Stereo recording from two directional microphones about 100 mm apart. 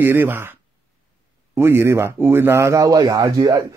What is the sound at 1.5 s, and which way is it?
A man's voice, 25° right (ahead or behind).